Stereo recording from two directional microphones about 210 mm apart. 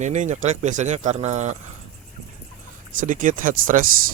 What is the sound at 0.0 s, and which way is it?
Speech, 35° right (ahead or behind).